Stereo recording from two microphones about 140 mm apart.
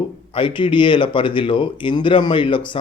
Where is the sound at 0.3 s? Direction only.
35° left (ahead or behind).